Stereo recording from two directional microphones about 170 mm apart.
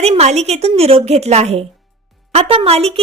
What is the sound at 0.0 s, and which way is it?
A woman's voice, 40° right (ahead or behind).